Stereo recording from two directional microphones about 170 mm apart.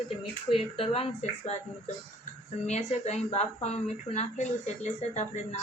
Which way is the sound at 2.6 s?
40° left (ahead or behind).